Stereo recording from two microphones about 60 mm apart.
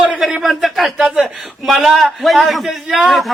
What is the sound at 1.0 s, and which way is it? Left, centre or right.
Speech, centre.